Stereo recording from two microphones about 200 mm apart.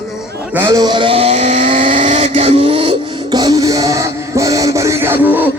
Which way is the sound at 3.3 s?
20° right (ahead or behind).